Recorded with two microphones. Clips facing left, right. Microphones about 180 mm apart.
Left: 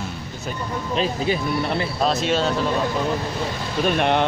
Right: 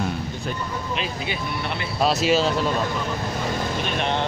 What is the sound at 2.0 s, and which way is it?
Speech, 5° right (ahead or behind).